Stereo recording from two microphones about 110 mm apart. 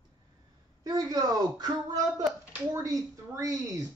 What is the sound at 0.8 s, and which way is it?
Speech, 35° right (ahead or behind).